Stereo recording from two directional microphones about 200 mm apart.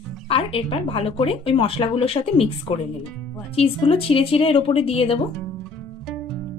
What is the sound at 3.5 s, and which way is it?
A woman's voice, 30° left (ahead or behind).